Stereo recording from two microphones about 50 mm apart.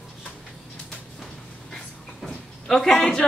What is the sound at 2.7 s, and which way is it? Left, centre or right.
Speech, centre.